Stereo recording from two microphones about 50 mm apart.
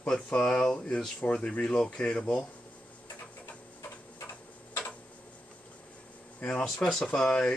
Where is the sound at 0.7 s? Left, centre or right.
Left.